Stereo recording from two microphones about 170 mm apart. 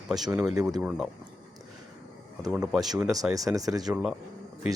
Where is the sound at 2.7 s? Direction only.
Centre (ahead or behind).